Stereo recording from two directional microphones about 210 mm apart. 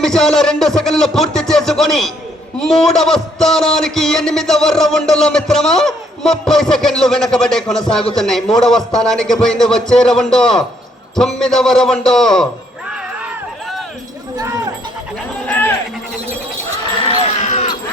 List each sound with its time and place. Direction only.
0.0 s a man's voice: centre (ahead or behind)
14.3 s a sound: 15° right (ahead or behind)
15.4 s sheep: 10° left (ahead or behind)
17.3 s sheep: 35° left (ahead or behind)